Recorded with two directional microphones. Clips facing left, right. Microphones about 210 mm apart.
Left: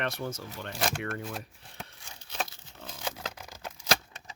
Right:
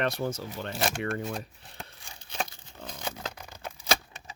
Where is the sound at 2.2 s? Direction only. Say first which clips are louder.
Right 2 dB; 5° left (ahead or behind).